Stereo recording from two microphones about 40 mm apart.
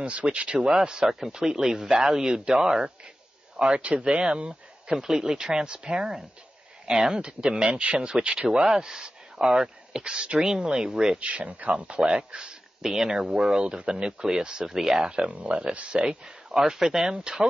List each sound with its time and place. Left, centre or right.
0.0 s speech: right; by 2.9 s centre
3.5 s speech: right
4.9 s speech: centre
11.1 s speech: right
12.3 s a sound: right
12.9 s speech: centre
13.7 s speech: right
14.2 s speech: centre
15.2 s speech: right